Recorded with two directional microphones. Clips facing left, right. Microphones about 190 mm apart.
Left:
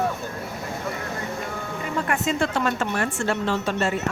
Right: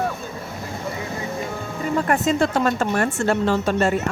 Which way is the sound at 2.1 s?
40° right (ahead or behind).